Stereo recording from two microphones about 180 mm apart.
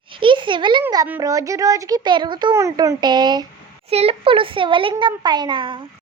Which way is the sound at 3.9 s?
35° right (ahead or behind).